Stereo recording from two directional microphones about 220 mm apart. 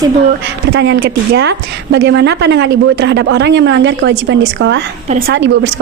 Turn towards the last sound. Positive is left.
turn(degrees=-55)  # may be behind; listen again after turning